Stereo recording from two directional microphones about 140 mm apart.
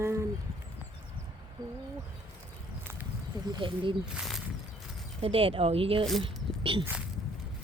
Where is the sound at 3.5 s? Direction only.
35° right (ahead or behind).